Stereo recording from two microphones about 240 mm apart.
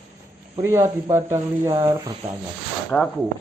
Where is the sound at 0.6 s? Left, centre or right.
Centre.